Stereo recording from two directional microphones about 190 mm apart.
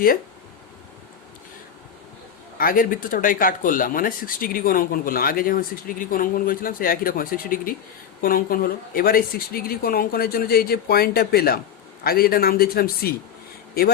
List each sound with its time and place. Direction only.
2.6 s speech: 45° left (ahead or behind)